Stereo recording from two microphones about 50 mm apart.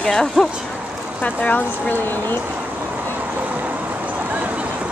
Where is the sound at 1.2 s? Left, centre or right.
Left.